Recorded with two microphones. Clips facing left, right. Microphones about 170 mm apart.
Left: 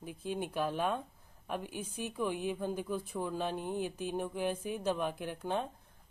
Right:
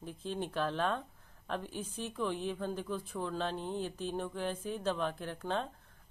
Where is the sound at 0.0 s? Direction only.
10° left (ahead or behind).